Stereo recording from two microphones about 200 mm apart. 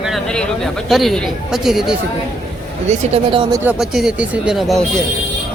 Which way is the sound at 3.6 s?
5° right (ahead or behind).